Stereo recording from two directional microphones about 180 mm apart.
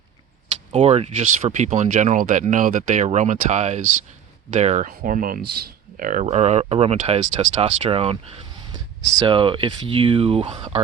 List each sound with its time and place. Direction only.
0.7 s speech: 35° right (ahead or behind)